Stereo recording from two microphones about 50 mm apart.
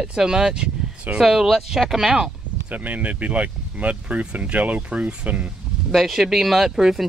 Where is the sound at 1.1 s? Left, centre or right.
Centre.